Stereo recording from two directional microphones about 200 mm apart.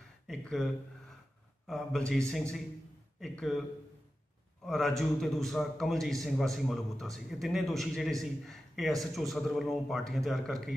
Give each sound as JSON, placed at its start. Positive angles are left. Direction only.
{"t": 0.3, "sound": "speech", "side_deg": 5}
{"t": 1.7, "sound": "a man's voice", "side_deg": 0}
{"t": 4.6, "sound": "a man's voice", "side_deg": 0}